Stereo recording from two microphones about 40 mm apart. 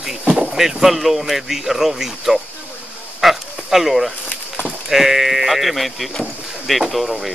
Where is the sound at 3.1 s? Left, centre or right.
Centre.